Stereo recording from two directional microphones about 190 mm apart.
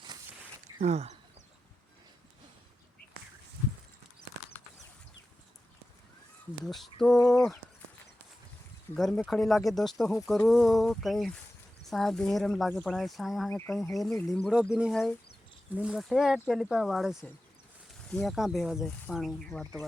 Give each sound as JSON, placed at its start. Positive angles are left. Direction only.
{"t": 0.8, "sound": "speech", "side_deg": -35}
{"t": 6.7, "sound": "speech", "side_deg": 0}
{"t": 9.0, "sound": "speech", "side_deg": 5}